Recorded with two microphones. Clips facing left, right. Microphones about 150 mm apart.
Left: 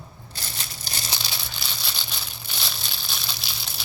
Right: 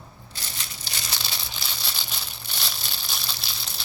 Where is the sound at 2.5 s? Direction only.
Centre (ahead or behind).